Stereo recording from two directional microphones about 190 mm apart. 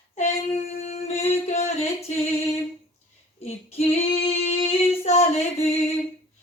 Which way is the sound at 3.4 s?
30° left (ahead or behind).